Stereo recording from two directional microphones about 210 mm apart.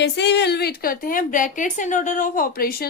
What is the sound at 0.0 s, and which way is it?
A woman's voice, 55° left (ahead or behind).